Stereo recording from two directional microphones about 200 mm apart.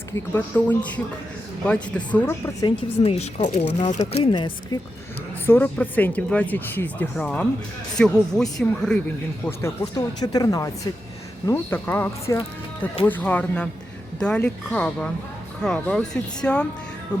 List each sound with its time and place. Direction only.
0.3 s speech: 10° left (ahead or behind)
2.6 s speech: 30° left (ahead or behind)
5.5 s speech: 10° left (ahead or behind)